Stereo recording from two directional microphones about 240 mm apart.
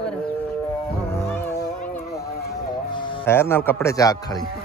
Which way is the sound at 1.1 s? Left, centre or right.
Centre.